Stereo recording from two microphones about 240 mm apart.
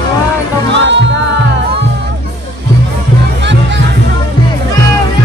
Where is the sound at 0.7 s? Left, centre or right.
Right.